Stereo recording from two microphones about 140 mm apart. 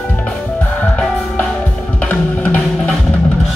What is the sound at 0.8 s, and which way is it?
Music, 5° left (ahead or behind).